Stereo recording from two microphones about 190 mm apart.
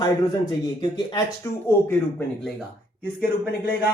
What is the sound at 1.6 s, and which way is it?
Speech, 10° left (ahead or behind).